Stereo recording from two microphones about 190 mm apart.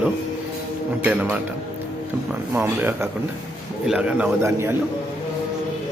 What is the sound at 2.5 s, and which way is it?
A man's voice, 10° right (ahead or behind).